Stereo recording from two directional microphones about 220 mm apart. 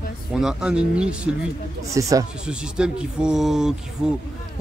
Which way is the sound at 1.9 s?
15° right (ahead or behind).